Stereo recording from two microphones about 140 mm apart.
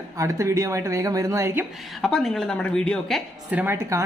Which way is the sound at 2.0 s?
5° left (ahead or behind).